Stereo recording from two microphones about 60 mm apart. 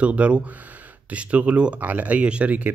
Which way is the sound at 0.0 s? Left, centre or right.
Right.